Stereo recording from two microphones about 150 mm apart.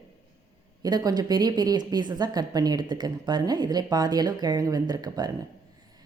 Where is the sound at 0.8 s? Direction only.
25° right (ahead or behind).